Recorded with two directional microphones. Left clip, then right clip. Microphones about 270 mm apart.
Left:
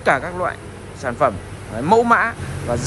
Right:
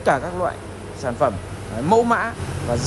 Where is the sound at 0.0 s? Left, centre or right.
Centre.